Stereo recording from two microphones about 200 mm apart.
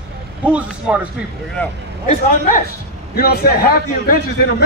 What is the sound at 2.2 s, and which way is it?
A man's voice, 40° left (ahead or behind).